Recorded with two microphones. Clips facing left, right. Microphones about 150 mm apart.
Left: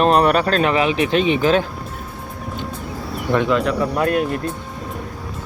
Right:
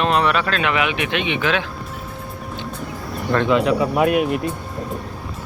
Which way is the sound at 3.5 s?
Centre (ahead or behind).